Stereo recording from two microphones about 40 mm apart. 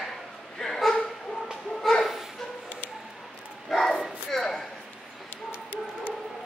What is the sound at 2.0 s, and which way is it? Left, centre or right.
Bow-wow, centre.